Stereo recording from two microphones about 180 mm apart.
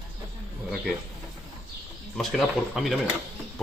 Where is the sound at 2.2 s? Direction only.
Centre (ahead or behind).